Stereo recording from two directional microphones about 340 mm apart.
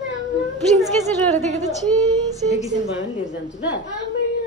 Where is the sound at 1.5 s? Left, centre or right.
Centre.